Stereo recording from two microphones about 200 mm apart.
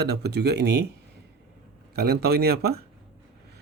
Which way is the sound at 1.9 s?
50° right (ahead or behind).